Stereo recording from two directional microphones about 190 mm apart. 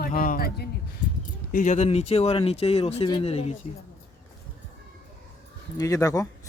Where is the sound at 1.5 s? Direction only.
40° left (ahead or behind).